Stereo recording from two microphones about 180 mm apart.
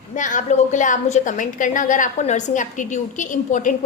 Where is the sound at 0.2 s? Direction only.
45° left (ahead or behind).